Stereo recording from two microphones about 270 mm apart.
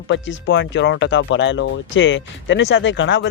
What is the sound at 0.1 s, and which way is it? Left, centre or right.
Speech, left.